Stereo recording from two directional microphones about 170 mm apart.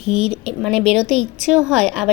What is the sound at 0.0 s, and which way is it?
A woman's voice, 35° right (ahead or behind).